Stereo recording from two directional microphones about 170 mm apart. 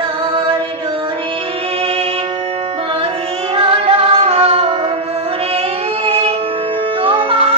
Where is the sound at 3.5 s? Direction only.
35° right (ahead or behind).